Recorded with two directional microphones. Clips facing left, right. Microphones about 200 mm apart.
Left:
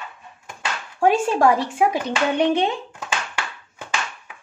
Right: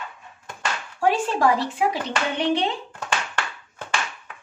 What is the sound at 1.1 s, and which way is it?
Speech, 45° left (ahead or behind).